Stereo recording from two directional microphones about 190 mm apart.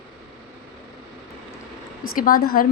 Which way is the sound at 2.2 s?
50° left (ahead or behind).